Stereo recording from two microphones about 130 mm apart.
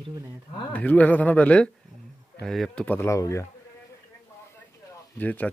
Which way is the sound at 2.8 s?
15° left (ahead or behind).